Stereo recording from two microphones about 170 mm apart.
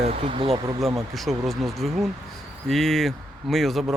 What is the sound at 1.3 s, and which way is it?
Speech, centre (ahead or behind).